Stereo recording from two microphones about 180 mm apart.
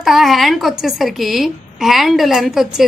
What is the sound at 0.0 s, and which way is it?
Speech, centre (ahead or behind).